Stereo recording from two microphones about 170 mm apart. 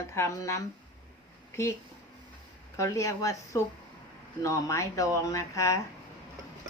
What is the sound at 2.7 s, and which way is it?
Speech, 15° left (ahead or behind).